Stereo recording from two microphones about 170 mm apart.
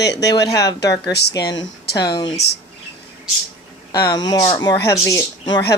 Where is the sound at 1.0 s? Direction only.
80° left.